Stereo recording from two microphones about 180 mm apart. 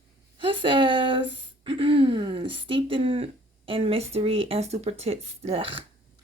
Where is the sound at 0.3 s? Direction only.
30° right (ahead or behind).